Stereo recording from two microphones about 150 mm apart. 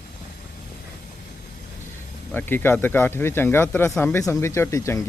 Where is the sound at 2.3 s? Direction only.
15° left (ahead or behind).